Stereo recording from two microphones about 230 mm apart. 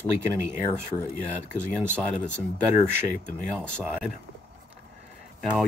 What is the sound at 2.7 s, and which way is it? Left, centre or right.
Speech, left.